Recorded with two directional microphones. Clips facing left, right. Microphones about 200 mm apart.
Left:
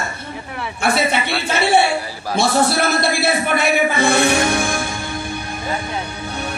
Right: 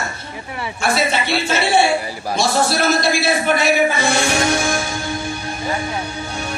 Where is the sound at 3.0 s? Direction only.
60° left (ahead or behind).